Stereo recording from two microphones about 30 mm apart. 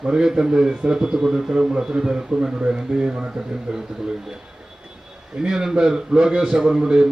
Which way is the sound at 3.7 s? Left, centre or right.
Centre.